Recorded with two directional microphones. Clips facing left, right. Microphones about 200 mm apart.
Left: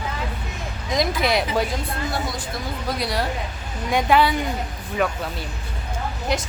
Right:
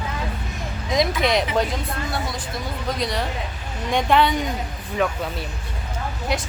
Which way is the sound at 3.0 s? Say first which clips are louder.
Left 1 dB; 10° left (ahead or behind).